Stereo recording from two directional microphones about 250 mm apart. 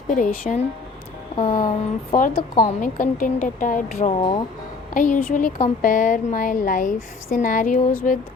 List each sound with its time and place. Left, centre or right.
0.1 s speech: left
1.4 s music: left
2.1 s speech: left
4.2 s speech: centre
4.9 s speech: left